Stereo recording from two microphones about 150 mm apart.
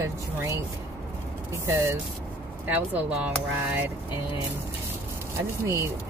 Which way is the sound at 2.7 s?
10° right (ahead or behind).